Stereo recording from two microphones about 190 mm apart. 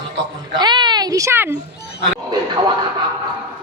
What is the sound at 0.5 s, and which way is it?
Speech, 25° right (ahead or behind).